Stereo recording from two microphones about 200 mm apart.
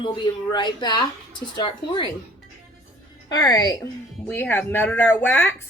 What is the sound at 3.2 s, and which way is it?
Speech, 20° left (ahead or behind).